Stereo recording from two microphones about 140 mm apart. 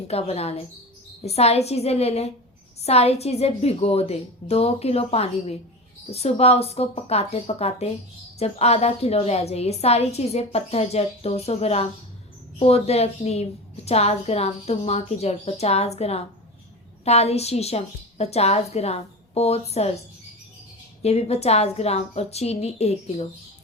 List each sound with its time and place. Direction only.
0.1 s a woman's voice: 50° left (ahead or behind)
21.0 s a woman's voice: 50° left (ahead or behind)